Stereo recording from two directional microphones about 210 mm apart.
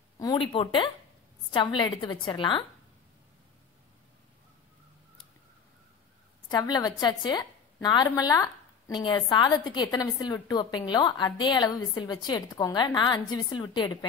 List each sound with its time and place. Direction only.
0.2 s a woman's voice: 20° left (ahead or behind)
6.5 s a woman's voice: 20° left (ahead or behind)